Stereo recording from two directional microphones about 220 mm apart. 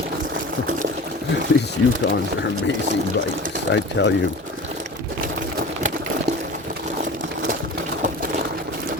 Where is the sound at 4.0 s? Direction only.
55° left (ahead or behind).